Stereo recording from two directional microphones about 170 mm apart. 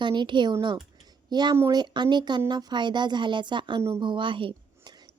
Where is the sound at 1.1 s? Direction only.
25° right (ahead or behind).